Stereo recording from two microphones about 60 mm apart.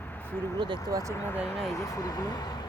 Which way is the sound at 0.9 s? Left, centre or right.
Right.